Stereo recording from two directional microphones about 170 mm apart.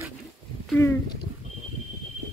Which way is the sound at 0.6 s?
10° left (ahead or behind).